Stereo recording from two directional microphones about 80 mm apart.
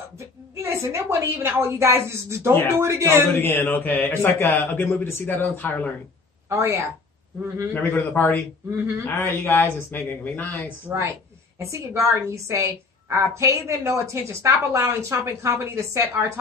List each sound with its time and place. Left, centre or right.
0.2 s a woman's voice: right
3.3 s a man's voice: left
6.5 s a woman's voice: right
7.7 s a man's voice: left
10.9 s a woman's voice: right
11.5 s a woman's voice: right